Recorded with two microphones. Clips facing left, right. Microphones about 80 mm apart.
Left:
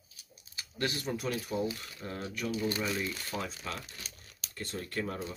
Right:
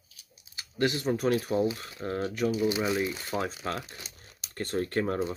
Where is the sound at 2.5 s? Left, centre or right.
Centre.